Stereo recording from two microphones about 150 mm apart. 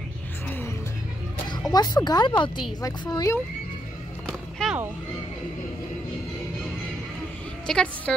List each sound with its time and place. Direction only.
1.7 s speech: 25° left (ahead or behind)
4.3 s music: centre (ahead or behind)
7.6 s a woman's voice: 5° left (ahead or behind)